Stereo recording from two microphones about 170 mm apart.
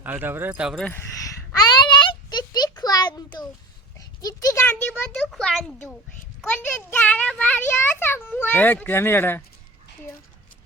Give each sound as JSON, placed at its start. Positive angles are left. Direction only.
{"t": 0.0, "sound": "a man's voice", "side_deg": -10}
{"t": 0.9, "sound": "a sound", "side_deg": 15}
{"t": 4.2, "sound": "speech", "side_deg": 20}
{"t": 4.6, "sound": "a child's voice", "side_deg": 10}